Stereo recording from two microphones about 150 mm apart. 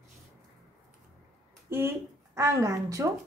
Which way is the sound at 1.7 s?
15° right (ahead or behind).